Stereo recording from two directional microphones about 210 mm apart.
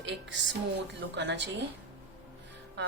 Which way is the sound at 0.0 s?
60° right (ahead or behind).